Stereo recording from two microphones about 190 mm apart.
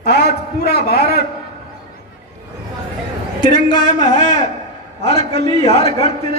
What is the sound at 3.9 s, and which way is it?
A man's voice, 40° left (ahead or behind).